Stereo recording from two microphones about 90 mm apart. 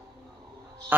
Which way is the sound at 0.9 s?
20° right (ahead or behind).